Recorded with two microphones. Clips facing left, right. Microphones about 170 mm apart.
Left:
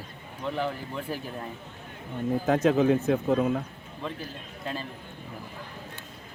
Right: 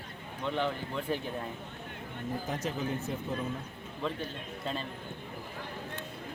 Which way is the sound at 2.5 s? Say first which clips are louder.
Left 15 dB; 90° left.